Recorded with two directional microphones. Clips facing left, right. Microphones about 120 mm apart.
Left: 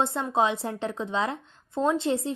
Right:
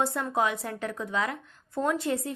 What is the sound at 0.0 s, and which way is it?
A woman's voice, 25° left (ahead or behind).